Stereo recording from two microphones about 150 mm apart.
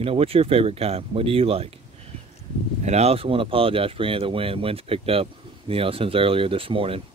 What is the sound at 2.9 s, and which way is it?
Speech, 45° right (ahead or behind).